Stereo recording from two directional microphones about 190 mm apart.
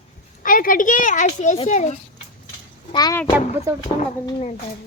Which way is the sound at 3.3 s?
15° right (ahead or behind).